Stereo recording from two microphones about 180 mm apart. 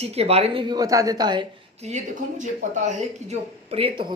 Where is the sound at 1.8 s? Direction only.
35° right (ahead or behind).